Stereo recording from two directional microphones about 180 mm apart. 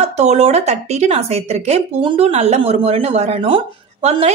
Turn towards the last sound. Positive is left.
turn(degrees=-35)  # may be behind; listen again after turning